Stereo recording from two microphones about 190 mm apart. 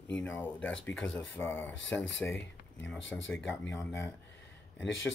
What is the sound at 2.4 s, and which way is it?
Speech, 75° left (ahead or behind).